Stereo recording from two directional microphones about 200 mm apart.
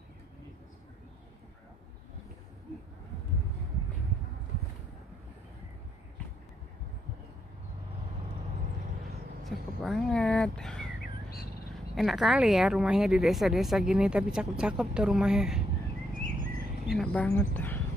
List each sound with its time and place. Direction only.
9.4 s speech: centre (ahead or behind)
11.9 s speech: centre (ahead or behind)
16.1 s bird: 45° right (ahead or behind)
16.8 s a woman's voice: centre (ahead or behind)